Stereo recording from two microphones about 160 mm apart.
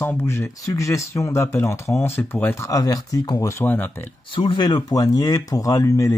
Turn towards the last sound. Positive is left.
turn(degrees=20)  # may be behind; listen again after turning